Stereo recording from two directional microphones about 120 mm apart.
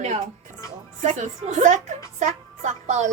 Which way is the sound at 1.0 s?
85° right.